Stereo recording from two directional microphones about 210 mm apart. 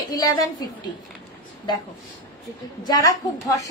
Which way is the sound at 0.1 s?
15° left (ahead or behind).